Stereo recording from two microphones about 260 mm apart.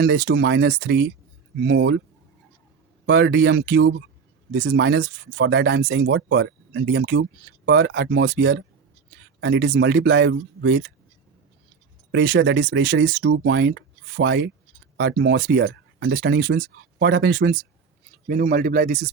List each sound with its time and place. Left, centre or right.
0.0 s speech: right
3.1 s speech: right
12.1 s speech: right
12.9 s speech: right